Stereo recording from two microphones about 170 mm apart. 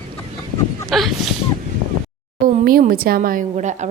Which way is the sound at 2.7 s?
60° right (ahead or behind).